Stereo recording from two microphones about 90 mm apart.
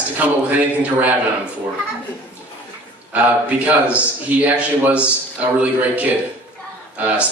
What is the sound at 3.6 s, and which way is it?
A man's voice, 15° right (ahead or behind).